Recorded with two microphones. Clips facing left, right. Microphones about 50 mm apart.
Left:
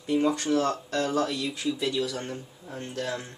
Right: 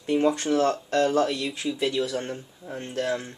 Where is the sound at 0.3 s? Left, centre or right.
Right.